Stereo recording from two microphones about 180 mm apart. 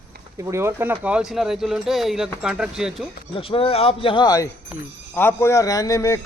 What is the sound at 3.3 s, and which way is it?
Speech, 30° left (ahead or behind).